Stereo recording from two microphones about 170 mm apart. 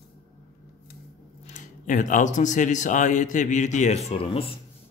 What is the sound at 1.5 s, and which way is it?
A man's voice, 50° left (ahead or behind).